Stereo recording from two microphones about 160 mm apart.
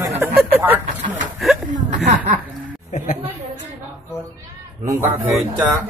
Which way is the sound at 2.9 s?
50° left (ahead or behind).